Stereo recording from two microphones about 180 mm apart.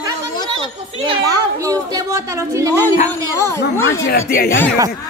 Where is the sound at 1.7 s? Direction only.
15° right (ahead or behind).